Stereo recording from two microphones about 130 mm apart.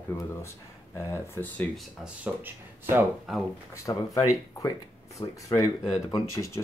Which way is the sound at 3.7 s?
25° left (ahead or behind).